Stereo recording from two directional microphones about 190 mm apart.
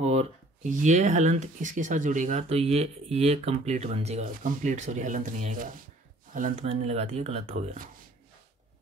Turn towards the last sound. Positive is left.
turn(degrees=-40)  # may be behind; listen again after turning